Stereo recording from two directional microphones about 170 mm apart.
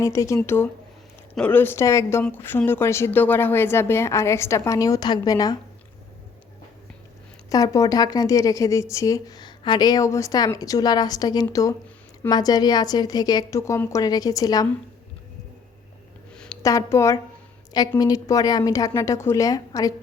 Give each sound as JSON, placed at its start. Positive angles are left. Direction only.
{"t": 0.0, "sound": "a woman's voice", "side_deg": 20}
{"t": 7.5, "sound": "speech", "side_deg": 20}
{"t": 16.3, "sound": "a sound", "side_deg": 5}
{"t": 16.6, "sound": "a woman's voice", "side_deg": 20}